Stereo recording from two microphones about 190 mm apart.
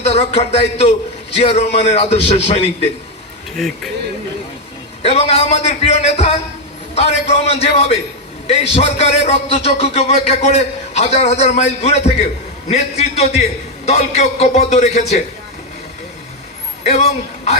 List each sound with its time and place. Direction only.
0.0 s speech: 35° left (ahead or behind)
5.0 s speech: 35° left (ahead or behind)
16.8 s a man's voice: 35° left (ahead or behind)